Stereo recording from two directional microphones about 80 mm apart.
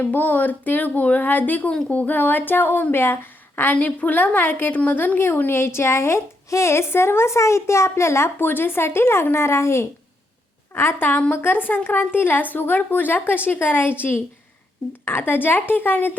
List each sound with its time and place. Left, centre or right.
0.0 s speech: left
15.0 s speech: left